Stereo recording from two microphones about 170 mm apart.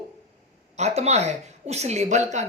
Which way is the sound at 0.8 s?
40° right (ahead or behind).